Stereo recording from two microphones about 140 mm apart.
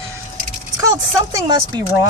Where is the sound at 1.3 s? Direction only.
30° right (ahead or behind).